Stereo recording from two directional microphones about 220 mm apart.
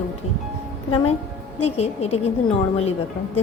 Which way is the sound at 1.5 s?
30° left (ahead or behind).